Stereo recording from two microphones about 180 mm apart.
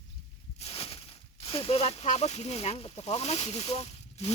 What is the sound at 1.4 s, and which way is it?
Speech, 30° left (ahead or behind).